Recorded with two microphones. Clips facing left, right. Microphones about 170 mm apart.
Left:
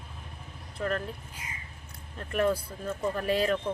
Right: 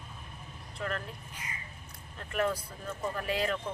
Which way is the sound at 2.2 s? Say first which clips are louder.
Left 4 dB; 35° left (ahead or behind).